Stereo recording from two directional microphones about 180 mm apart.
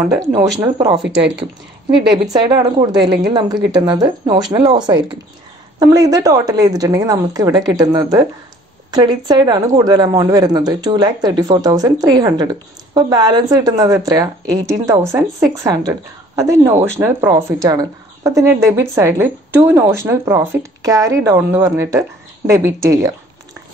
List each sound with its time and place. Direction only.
0.2 s speech: 25° right (ahead or behind)
2.3 s speech: 25° right (ahead or behind)